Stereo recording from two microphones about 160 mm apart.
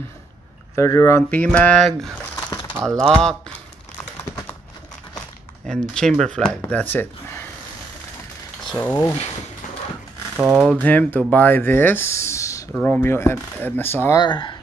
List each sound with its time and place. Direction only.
0.7 s speech: 15° left (ahead or behind)
5.7 s speech: centre (ahead or behind)
8.6 s a sound: 5° left (ahead or behind)
10.3 s speech: 5° right (ahead or behind)
10.8 s speech: 10° left (ahead or behind)
14.2 s speech: 30° left (ahead or behind)